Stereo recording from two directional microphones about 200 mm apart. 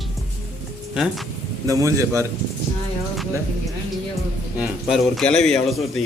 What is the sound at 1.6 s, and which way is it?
Speech, 15° right (ahead or behind).